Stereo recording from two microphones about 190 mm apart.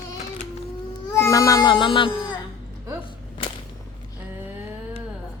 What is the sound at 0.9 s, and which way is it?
Baby cry, 15° left (ahead or behind).